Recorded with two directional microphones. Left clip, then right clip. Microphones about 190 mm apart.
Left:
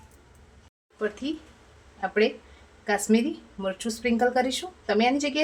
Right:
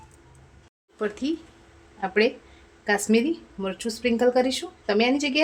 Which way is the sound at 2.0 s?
40° right (ahead or behind).